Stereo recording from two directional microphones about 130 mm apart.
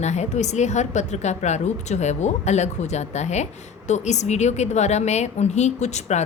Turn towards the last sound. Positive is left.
turn(degrees=60)  # may be behind; listen again after turning